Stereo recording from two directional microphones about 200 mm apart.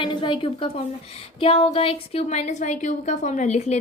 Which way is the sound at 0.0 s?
25° left (ahead or behind).